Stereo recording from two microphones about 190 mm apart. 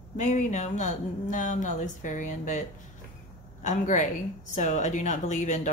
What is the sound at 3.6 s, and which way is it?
Speech, 40° left (ahead or behind).